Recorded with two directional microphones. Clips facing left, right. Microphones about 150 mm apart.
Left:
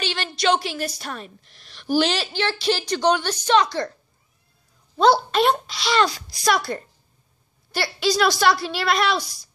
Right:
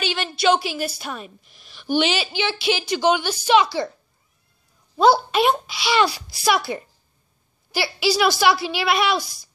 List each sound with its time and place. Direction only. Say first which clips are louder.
0.1 s a woman's voice: right 2 dB; 5° right (ahead or behind)
4.9 s a woman's voice: right 1 dB; 5° right (ahead or behind)